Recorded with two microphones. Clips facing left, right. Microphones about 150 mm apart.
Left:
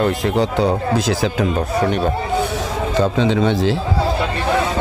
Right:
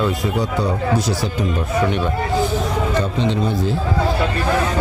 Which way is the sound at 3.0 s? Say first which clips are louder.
Left 4 dB; 90° left.